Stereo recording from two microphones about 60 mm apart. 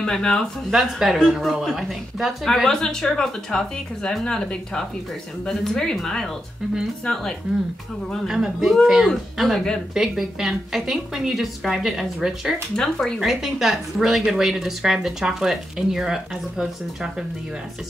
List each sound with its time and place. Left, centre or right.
0.0 s speech: centre
0.7 s speech: centre
2.4 s speech: centre
7.5 s a woman's voice: centre
8.3 s a woman's voice: centre
12.7 s speech: centre
13.2 s a woman's voice: centre